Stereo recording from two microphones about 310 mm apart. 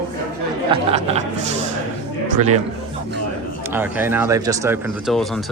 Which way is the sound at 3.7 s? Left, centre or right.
Centre.